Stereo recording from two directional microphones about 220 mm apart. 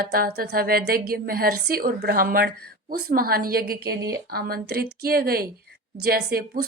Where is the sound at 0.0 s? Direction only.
45° right (ahead or behind).